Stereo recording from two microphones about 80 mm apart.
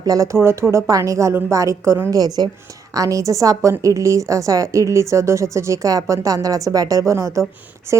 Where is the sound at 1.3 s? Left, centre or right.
Right.